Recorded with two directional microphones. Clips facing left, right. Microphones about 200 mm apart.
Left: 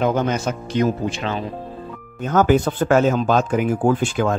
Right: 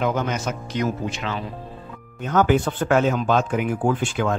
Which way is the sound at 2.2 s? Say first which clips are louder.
Left 3 dB; 40° left (ahead or behind).